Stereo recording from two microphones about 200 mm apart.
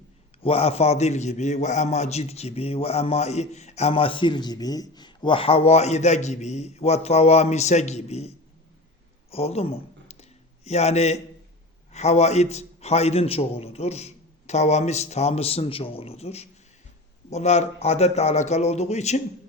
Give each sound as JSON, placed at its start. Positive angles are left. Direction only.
{"t": 0.4, "sound": "a man's voice", "side_deg": 30}
{"t": 9.3, "sound": "a sound", "side_deg": 30}
{"t": 11.9, "sound": "a man's voice", "side_deg": 35}